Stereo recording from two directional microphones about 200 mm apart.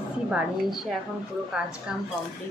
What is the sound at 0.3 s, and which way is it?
Speech, centre (ahead or behind).